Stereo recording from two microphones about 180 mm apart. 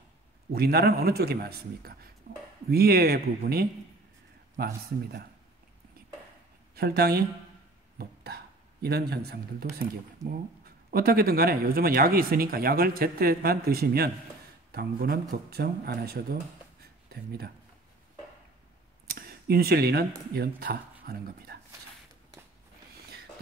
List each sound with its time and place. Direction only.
0.5 s speech: 60° right (ahead or behind)
6.7 s speech: 60° right (ahead or behind)
8.0 s hiccup: 60° right (ahead or behind)
8.8 s speech: 60° right (ahead or behind)
10.2 s speech: 15° right (ahead or behind)
10.6 s speech: 55° right (ahead or behind)
16.8 s a sound: 60° right (ahead or behind)
19.0 s a sound: 55° right (ahead or behind)
20.3 s speech: 55° right (ahead or behind)